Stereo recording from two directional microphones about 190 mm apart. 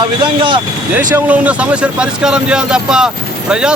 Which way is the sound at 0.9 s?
10° right (ahead or behind).